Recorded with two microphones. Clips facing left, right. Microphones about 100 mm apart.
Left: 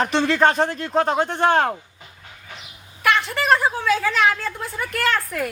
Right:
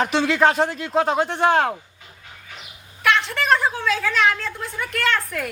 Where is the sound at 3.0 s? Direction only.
5° left (ahead or behind).